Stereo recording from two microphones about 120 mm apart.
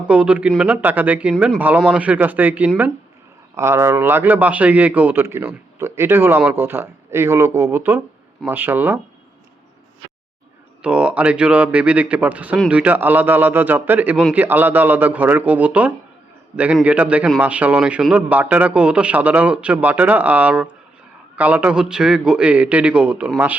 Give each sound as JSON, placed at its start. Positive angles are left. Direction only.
{"t": 0.0, "sound": "a man's voice", "side_deg": -10}
{"t": 10.8, "sound": "a man's voice", "side_deg": -10}